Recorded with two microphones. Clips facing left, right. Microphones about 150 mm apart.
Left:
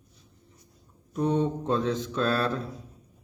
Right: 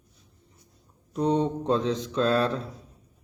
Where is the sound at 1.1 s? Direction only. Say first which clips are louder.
Right 1 dB; 20° right (ahead or behind).